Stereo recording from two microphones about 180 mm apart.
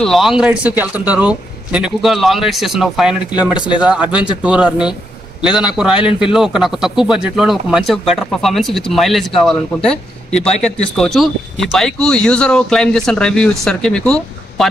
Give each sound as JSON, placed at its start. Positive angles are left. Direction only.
{"t": 0.0, "sound": "speech", "side_deg": 0}
{"t": 3.5, "sound": "speech", "side_deg": 25}
{"t": 3.8, "sound": "speech", "side_deg": -5}
{"t": 10.3, "sound": "a man's voice", "side_deg": 35}
{"t": 10.6, "sound": "speech", "side_deg": 0}